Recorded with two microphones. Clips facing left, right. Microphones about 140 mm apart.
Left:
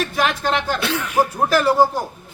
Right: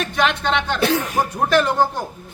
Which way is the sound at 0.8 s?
40° right (ahead or behind).